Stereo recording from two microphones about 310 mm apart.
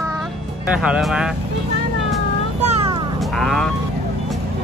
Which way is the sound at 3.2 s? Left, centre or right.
Centre.